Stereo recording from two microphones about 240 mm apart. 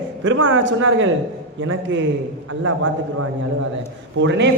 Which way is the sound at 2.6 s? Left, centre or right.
Right.